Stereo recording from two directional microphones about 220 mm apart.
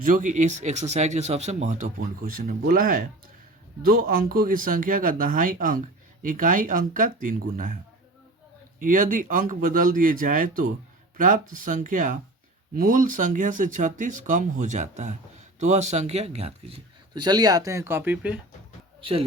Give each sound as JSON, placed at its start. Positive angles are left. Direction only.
{"t": 0.0, "sound": "speech", "side_deg": -35}
{"t": 8.8, "sound": "speech", "side_deg": -35}
{"t": 17.2, "sound": "speech", "side_deg": -15}